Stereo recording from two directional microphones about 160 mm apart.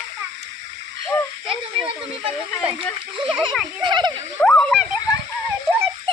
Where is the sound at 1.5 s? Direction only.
35° right (ahead or behind).